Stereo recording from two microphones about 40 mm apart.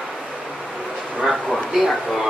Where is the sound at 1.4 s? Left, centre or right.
Centre.